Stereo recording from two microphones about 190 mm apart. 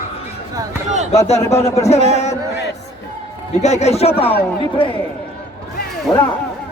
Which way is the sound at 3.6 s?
35° left (ahead or behind).